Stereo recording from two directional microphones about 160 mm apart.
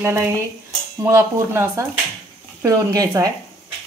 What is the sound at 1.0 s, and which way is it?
A woman's voice, 20° right (ahead or behind).